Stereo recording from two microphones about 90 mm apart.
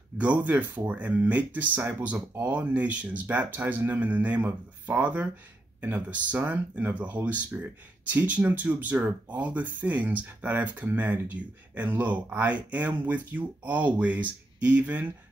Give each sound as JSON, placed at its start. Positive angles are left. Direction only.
{"t": 0.2, "sound": "speech", "side_deg": -15}
{"t": 1.8, "sound": "speech", "side_deg": -30}
{"t": 2.0, "sound": "speech", "side_deg": -20}